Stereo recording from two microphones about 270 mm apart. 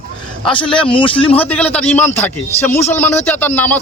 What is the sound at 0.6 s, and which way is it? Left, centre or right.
Speech, centre.